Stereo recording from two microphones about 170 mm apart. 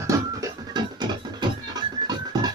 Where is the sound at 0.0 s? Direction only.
25° right (ahead or behind).